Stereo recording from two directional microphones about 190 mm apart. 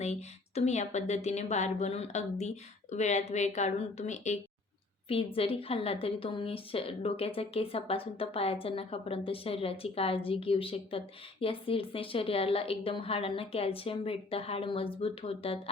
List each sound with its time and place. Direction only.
0.0 s a woman's voice: 35° left (ahead or behind)